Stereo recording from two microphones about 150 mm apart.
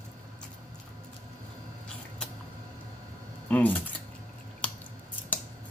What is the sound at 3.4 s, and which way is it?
Speech, 10° left (ahead or behind).